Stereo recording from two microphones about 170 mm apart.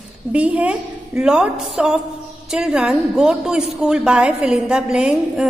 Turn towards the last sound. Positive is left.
turn(degrees=-5)  # may be behind; listen again after turning